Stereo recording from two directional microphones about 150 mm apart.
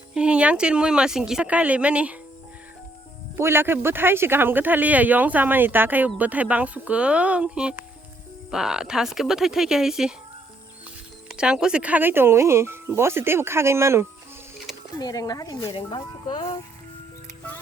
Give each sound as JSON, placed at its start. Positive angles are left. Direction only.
{"t": 0.1, "sound": "speech", "side_deg": -5}
{"t": 3.3, "sound": "speech", "side_deg": -15}
{"t": 11.3, "sound": "speech", "side_deg": -5}
{"t": 14.9, "sound": "speech", "side_deg": 25}